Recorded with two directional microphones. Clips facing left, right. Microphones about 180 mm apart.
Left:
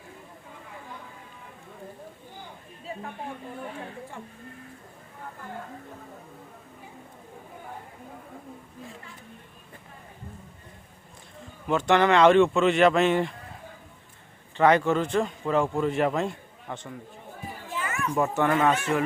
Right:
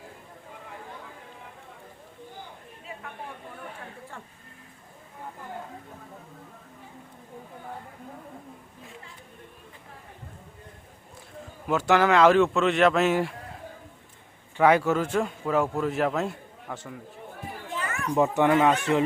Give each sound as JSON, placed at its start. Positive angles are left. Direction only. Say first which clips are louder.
{"t": 11.7, "sound": "a man's voice", "louder": "even", "side_deg": -5}
{"t": 14.5, "sound": "a man's voice", "louder": "even", "side_deg": -10}
{"t": 18.1, "sound": "speech", "louder": "right 3 dB", "side_deg": -15}